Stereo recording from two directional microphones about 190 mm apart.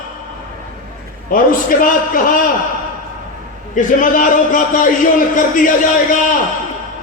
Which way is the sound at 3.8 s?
45° left (ahead or behind).